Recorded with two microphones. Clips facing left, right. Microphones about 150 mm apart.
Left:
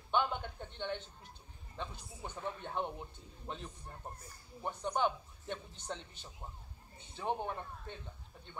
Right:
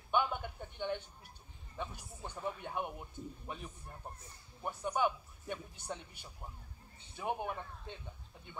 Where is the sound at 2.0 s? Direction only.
10° left (ahead or behind).